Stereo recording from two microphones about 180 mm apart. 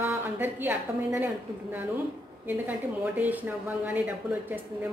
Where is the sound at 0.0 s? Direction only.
10° right (ahead or behind).